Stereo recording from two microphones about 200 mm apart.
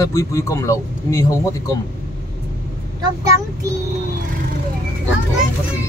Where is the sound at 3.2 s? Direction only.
15° right (ahead or behind).